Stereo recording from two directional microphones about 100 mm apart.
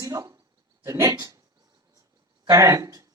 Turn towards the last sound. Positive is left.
turn(degrees=-35)  # may be behind; listen again after turning